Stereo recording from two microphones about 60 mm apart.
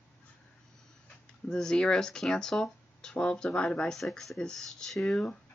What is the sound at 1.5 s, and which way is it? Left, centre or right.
Speech, centre.